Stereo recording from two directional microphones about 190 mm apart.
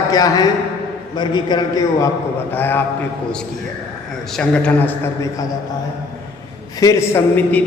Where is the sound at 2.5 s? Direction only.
10° left (ahead or behind).